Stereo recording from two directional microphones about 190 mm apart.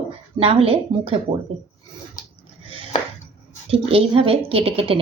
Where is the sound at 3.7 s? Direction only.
30° right (ahead or behind).